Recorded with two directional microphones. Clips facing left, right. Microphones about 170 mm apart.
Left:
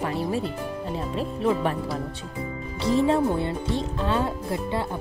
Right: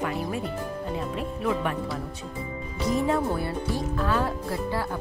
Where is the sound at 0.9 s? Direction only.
30° left (ahead or behind).